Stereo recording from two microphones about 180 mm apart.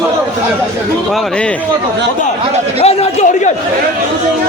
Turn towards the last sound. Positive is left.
turn(degrees=40)  # may be behind; listen again after turning